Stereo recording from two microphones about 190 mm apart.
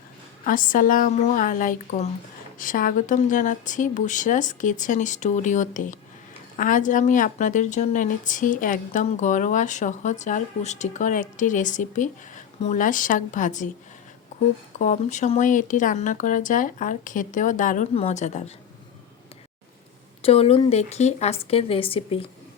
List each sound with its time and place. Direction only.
0.4 s a woman's voice: 45° left (ahead or behind)
14.8 s speech: 40° left (ahead or behind)
20.2 s a woman's voice: 30° left (ahead or behind)